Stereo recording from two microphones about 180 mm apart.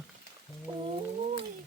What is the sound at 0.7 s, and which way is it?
Whale vocalization, 30° right (ahead or behind).